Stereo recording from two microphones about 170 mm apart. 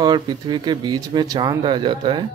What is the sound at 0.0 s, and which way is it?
Speech, 25° right (ahead or behind).